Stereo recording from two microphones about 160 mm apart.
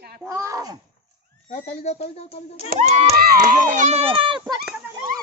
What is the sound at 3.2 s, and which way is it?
Speech, 65° right (ahead or behind).